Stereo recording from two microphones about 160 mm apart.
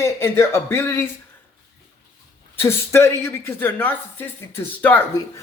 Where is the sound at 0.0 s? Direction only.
15° left (ahead or behind).